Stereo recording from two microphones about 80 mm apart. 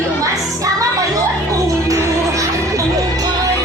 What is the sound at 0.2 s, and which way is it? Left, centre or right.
Music, right.